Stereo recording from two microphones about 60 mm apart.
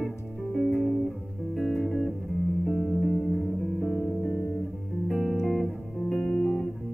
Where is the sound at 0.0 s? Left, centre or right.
Centre.